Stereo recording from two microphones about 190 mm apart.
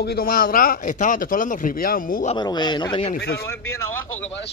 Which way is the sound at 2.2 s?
25° left (ahead or behind).